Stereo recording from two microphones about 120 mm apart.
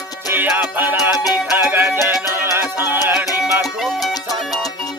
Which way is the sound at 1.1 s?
30° left (ahead or behind).